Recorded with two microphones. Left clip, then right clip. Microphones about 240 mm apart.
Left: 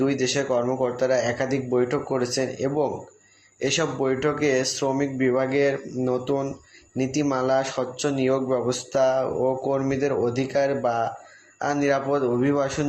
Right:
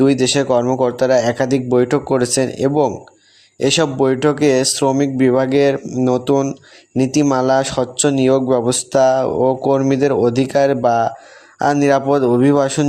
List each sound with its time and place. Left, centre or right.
0.0 s a man's voice: right